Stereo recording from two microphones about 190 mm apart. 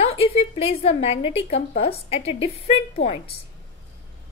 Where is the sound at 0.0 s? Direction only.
30° left (ahead or behind).